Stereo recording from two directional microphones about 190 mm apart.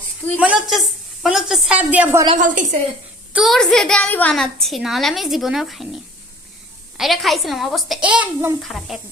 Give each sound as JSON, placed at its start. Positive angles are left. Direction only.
{"t": 0.3, "sound": "a woman's voice", "side_deg": -5}
{"t": 2.4, "sound": "a woman's voice", "side_deg": -40}
{"t": 3.3, "sound": "a woman's voice", "side_deg": 0}